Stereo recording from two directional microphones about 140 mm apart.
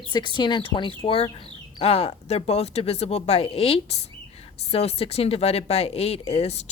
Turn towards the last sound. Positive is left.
turn(degrees=50)  # may be behind; listen again after turning